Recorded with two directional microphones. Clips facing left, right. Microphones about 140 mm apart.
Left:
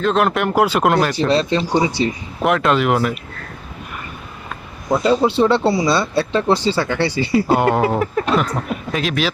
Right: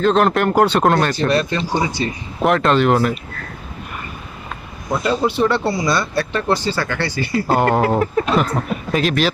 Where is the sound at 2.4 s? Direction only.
Centre (ahead or behind).